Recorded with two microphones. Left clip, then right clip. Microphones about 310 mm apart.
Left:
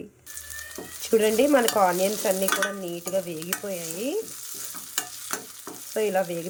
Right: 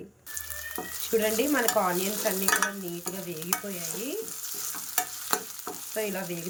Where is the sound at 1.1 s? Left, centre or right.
Centre.